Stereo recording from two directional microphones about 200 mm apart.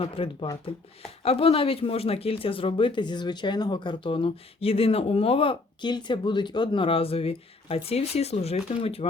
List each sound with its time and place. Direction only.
0.0 s speech: 30° left (ahead or behind)